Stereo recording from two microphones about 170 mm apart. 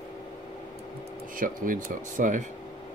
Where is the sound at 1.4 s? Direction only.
50° right (ahead or behind).